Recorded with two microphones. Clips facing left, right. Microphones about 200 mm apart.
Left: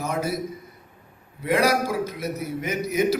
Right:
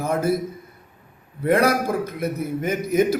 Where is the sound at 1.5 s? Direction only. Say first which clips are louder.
Right 3 dB; 55° right (ahead or behind).